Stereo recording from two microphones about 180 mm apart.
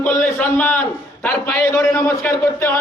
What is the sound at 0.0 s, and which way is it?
A man's voice, 5° left (ahead or behind).